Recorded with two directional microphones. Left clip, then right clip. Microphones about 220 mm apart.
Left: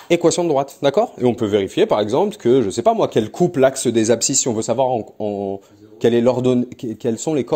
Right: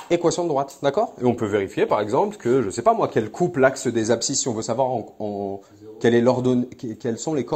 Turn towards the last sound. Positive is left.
turn(degrees=45)  # may be behind; listen again after turning